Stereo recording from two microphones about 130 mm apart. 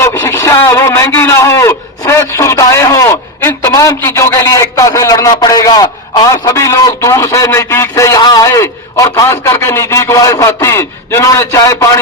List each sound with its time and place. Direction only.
0.0 s a man's voice: 20° left (ahead or behind)